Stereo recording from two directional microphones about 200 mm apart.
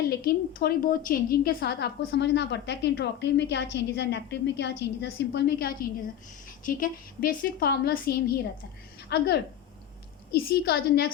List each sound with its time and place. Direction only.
0.1 s a woman's voice: 50° left (ahead or behind)